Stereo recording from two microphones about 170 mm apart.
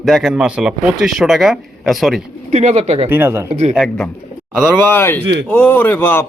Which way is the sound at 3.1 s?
15° right (ahead or behind).